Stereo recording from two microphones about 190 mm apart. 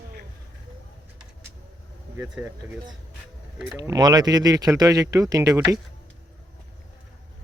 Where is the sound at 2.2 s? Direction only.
10° right (ahead or behind).